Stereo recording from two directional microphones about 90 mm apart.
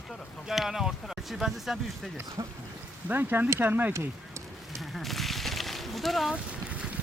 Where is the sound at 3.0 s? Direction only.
20° right (ahead or behind).